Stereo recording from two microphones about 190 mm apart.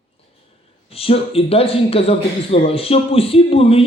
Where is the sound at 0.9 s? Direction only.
30° left (ahead or behind).